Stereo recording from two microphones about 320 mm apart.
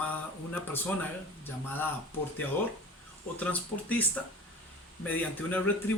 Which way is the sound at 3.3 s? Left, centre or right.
Centre.